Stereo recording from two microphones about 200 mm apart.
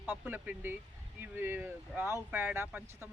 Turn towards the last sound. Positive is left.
turn(degrees=-10)  # may be behind; listen again after turning